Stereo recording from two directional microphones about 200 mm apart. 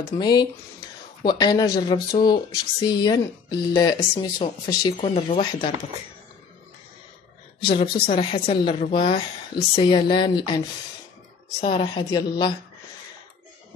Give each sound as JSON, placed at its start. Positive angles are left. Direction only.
{"t": 0.2, "sound": "speech", "side_deg": 20}
{"t": 7.7, "sound": "speech", "side_deg": 25}